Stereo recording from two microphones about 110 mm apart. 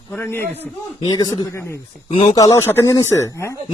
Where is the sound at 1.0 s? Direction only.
35° left (ahead or behind).